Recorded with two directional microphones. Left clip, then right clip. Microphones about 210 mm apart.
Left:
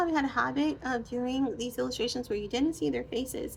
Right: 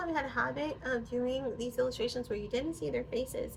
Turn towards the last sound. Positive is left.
turn(degrees=50)  # may be behind; listen again after turning